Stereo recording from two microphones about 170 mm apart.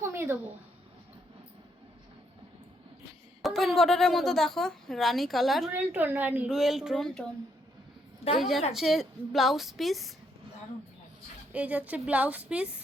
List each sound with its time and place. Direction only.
0.0 s a sound: 15° right (ahead or behind)
3.4 s a woman's voice: centre (ahead or behind)
8.4 s a woman's voice: centre (ahead or behind)
11.5 s a woman's voice: 10° right (ahead or behind)